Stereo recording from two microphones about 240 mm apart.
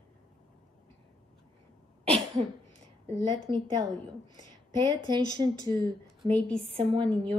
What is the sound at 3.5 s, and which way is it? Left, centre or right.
Speech, centre.